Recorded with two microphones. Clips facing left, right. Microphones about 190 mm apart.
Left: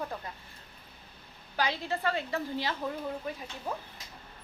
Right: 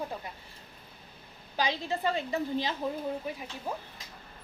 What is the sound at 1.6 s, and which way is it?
A woman's voice, 15° right (ahead or behind).